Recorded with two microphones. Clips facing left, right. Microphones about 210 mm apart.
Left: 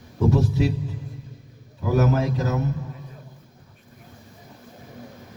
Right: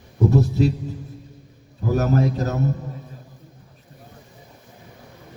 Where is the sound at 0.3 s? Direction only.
40° right (ahead or behind).